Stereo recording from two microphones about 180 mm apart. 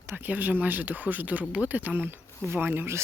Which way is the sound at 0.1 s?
10° right (ahead or behind).